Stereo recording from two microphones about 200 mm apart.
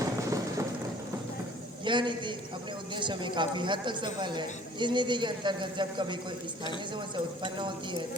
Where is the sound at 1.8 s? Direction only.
25° right (ahead or behind).